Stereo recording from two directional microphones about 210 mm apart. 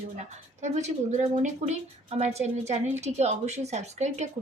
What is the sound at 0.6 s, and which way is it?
Speech, 35° right (ahead or behind).